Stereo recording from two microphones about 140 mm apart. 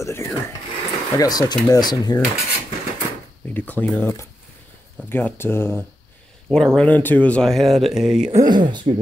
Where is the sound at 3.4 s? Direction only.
10° left (ahead or behind).